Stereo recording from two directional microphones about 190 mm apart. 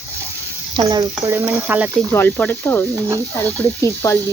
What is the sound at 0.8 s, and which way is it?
Speech, 20° right (ahead or behind).